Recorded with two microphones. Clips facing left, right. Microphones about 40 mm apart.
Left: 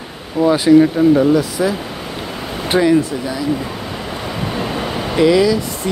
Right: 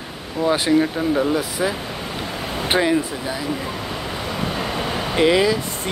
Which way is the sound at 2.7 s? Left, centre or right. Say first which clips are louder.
Left 5 dB; right.